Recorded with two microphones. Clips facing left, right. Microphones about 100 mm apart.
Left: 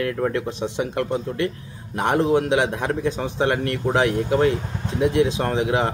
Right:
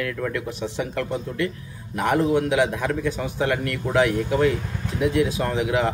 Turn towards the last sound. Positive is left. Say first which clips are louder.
# left 1 dB
turn(degrees=30)  # may be behind; listen again after turning